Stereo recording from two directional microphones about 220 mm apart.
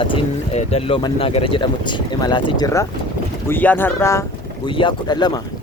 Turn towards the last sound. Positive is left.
turn(degrees=20)  # may be behind; listen again after turning